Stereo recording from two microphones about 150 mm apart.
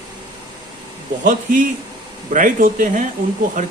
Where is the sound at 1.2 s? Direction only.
65° right (ahead or behind).